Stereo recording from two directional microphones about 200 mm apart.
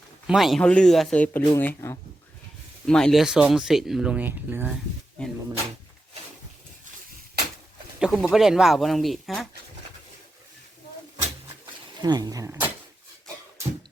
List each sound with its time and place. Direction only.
0.3 s speech: centre (ahead or behind)
7.9 s speech: 5° right (ahead or behind)
11.9 s speech: 20° right (ahead or behind)